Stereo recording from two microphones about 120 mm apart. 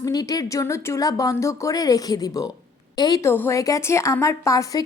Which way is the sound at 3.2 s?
20° left (ahead or behind).